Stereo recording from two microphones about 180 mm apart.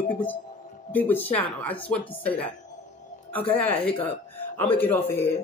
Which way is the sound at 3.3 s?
10° left (ahead or behind).